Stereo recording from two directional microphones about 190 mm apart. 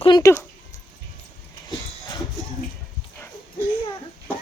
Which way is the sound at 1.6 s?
20° left (ahead or behind).